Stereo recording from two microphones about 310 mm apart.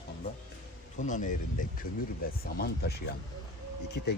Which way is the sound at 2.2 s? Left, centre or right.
Left.